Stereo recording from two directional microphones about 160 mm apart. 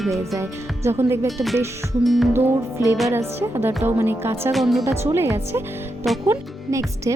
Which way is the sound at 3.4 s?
15° right (ahead or behind).